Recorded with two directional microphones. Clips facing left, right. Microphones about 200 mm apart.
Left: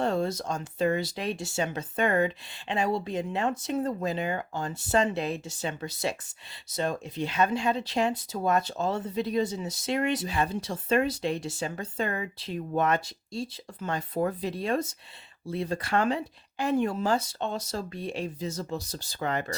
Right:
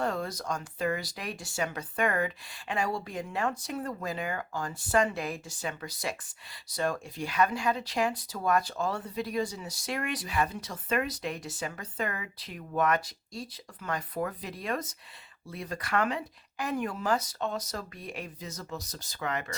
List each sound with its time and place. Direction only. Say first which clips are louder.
0.0 s speech: left 5 dB; 25° left (ahead or behind)